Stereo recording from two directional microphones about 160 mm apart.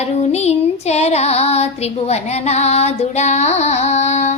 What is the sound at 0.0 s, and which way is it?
Child singing, 45° left (ahead or behind).